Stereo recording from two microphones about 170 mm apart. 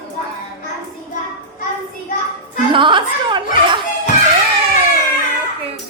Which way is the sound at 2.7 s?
30° right (ahead or behind).